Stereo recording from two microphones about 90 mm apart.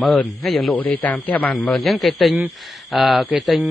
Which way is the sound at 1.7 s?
Centre (ahead or behind).